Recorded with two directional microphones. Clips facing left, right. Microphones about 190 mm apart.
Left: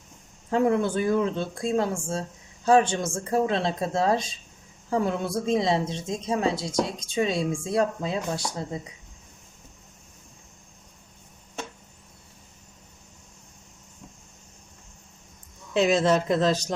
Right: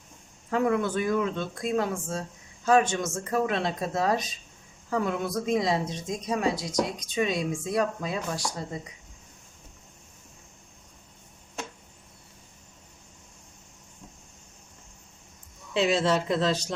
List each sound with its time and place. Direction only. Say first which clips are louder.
0.5 s a woman's voice: left 3 dB; 30° left (ahead or behind)
15.7 s speech: left 3 dB; 45° left (ahead or behind)